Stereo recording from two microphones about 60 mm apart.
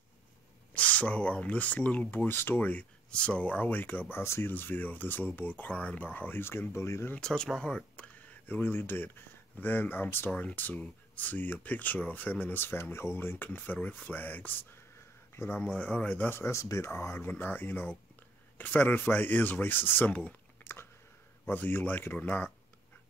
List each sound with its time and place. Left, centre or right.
0.7 s speech: left
2.2 s speech: left
2.7 s speech: centre
4.2 s speech: left
4.5 s speech: left
7.2 s speech: centre; by 10.3 s left
10.3 s speech: left
13.5 s speech: left
15.6 s speech: centre
16.3 s speech: left
16.9 s speech: left
20.6 s biting: left
21.5 s speech: left